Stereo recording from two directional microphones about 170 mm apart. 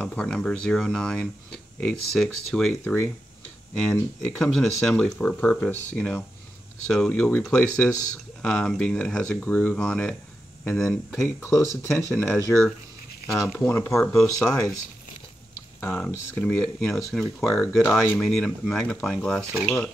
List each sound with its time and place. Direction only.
0.0 s speech: 5° left (ahead or behind)
4.4 s speech: centre (ahead or behind)
13.3 s speech: centre (ahead or behind)
13.7 s speech: 15° left (ahead or behind)
15.8 s speech: 10° left (ahead or behind)